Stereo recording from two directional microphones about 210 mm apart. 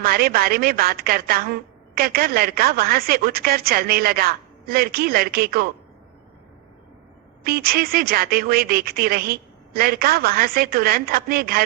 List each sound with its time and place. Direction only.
0.0 s speech: 45° right (ahead or behind)
7.4 s speech: 45° right (ahead or behind)